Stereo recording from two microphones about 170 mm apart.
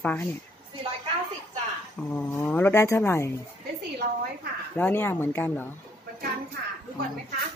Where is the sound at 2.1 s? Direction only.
10° left (ahead or behind).